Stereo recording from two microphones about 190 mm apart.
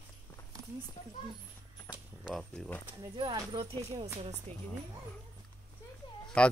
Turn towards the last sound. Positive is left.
turn(degrees=5)  # may be behind; listen again after turning